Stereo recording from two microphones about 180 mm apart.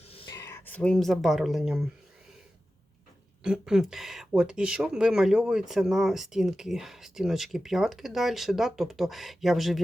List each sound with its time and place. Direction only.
0.1 s a sound: 30° left (ahead or behind)
0.3 s speech: 15° left (ahead or behind); by 1.9 s centre (ahead or behind)
3.4 s speech: 5° right (ahead or behind)